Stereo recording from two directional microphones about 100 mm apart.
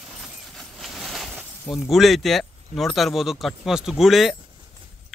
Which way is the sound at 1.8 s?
Centre (ahead or behind).